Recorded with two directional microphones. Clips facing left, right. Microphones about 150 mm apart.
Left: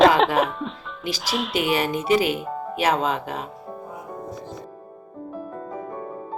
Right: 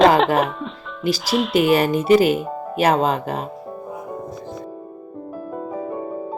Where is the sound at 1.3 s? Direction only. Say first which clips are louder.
Right 5 dB; centre (ahead or behind).